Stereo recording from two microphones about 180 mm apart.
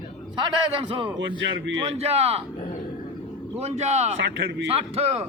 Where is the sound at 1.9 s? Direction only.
35° right (ahead or behind).